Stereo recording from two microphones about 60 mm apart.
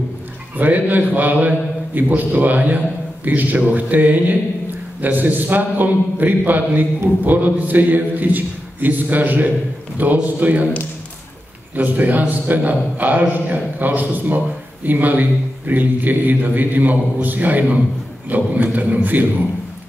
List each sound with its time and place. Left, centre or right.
0.6 s a man's voice: right
11.7 s a man's voice: right